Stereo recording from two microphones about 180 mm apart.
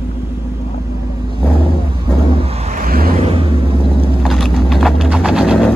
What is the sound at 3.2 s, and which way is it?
Vehicle, 30° right (ahead or behind).